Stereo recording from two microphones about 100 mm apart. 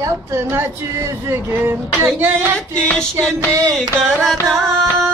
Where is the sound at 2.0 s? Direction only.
20° right (ahead or behind).